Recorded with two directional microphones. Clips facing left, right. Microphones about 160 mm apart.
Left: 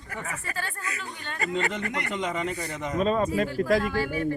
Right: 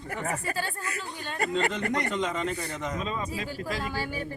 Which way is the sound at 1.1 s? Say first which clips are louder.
Right 3 dB; 30° right (ahead or behind).